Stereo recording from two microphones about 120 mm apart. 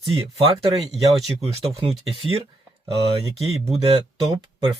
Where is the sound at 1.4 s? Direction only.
55° right (ahead or behind).